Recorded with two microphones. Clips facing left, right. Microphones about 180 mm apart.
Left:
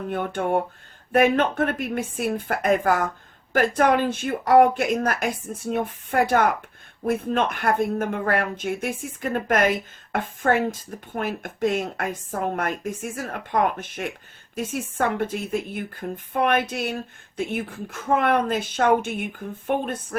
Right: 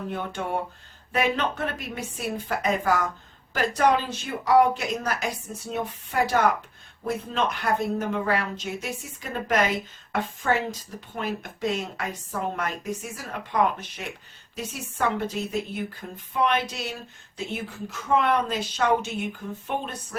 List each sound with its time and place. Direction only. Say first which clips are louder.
0.1 s speech: left 8 dB; 55° left (ahead or behind)